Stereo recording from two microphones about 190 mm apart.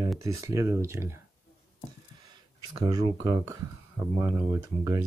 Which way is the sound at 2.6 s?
20° right (ahead or behind).